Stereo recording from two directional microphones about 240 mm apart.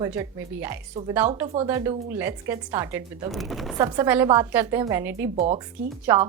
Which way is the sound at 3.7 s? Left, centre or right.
Centre.